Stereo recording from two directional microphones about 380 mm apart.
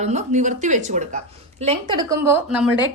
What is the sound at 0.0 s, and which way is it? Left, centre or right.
A woman's voice, centre.